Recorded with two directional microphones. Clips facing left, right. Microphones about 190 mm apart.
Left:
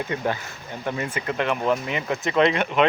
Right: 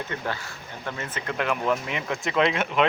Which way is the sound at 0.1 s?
20° left (ahead or behind).